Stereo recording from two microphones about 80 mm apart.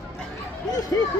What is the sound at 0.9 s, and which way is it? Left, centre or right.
Speech, left.